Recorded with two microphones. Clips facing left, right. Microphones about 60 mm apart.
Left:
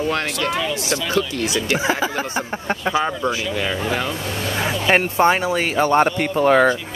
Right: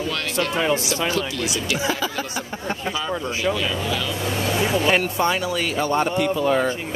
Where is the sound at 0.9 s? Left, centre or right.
Left.